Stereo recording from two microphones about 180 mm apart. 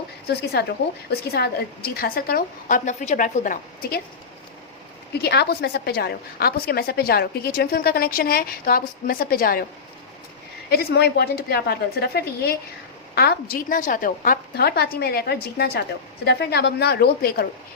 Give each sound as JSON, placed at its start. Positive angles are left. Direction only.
{"t": 0.6, "sound": "a woman's voice", "side_deg": 60}
{"t": 5.2, "sound": "a woman's voice", "side_deg": 65}
{"t": 10.7, "sound": "a woman's voice", "side_deg": 60}